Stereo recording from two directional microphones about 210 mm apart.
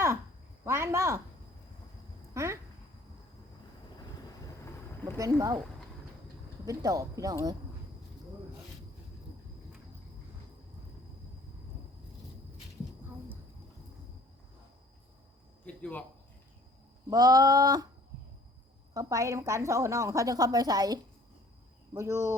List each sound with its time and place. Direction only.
0.6 s a woman's voice: 10° right (ahead or behind)
2.3 s speech: 15° right (ahead or behind)
5.1 s a woman's voice: 15° right (ahead or behind)
6.7 s a woman's voice: 15° right (ahead or behind)
13.1 s a sound: 10° right (ahead or behind)
15.6 s speech: 5° left (ahead or behind)
17.1 s a woman's voice: 15° right (ahead or behind)
18.9 s a woman's voice: 15° right (ahead or behind)